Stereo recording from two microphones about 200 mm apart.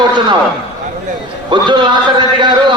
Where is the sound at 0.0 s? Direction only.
20° right (ahead or behind).